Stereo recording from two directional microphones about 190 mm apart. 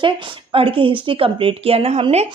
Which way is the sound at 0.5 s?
30° right (ahead or behind).